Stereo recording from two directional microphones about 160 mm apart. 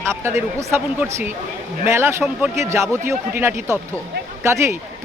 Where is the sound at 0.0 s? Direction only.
15° right (ahead or behind).